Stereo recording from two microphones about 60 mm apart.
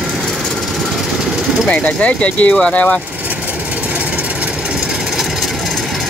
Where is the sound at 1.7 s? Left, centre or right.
Left.